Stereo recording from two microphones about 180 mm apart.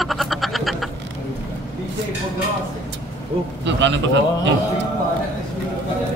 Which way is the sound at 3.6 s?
80° right.